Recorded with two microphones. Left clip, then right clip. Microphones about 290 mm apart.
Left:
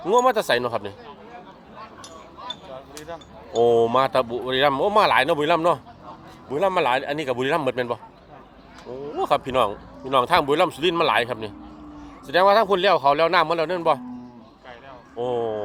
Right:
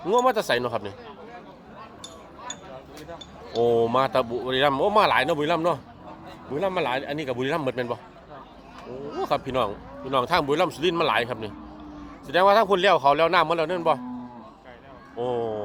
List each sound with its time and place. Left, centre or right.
0.0 s speech: centre
3.6 s a man's voice: centre
9.3 s a man's voice: centre
15.2 s a sound: centre